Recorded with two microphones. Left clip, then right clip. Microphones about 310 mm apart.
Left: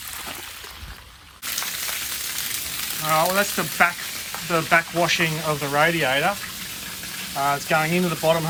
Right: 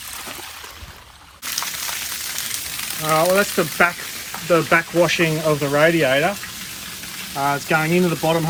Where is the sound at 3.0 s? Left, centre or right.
Centre.